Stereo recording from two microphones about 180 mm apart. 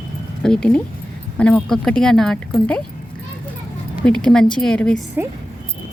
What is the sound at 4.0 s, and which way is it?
Speech, 5° left (ahead or behind).